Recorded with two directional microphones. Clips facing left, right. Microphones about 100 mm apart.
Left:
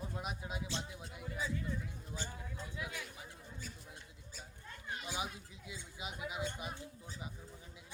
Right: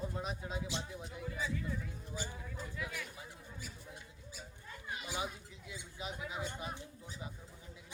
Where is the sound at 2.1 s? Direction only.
10° right (ahead or behind).